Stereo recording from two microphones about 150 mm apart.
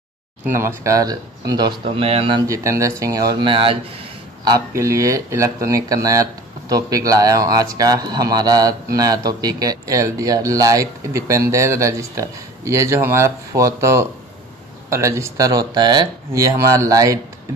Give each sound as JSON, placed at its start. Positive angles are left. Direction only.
{"t": 0.5, "sound": "speech", "side_deg": -15}
{"t": 2.4, "sound": "speech", "side_deg": -20}
{"t": 4.5, "sound": "speech", "side_deg": -20}